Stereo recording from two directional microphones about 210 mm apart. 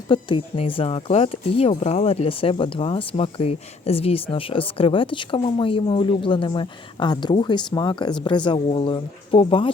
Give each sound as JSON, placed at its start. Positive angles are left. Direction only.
{"t": 0.1, "sound": "speech", "side_deg": 25}